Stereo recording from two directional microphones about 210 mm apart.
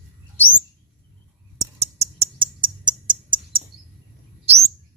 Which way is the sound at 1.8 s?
30° right (ahead or behind).